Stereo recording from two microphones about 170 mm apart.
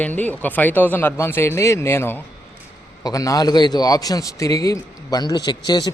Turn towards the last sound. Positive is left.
turn(degrees=25)  # may be behind; listen again after turning